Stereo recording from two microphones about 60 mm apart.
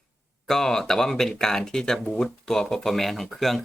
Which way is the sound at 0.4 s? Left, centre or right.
Centre.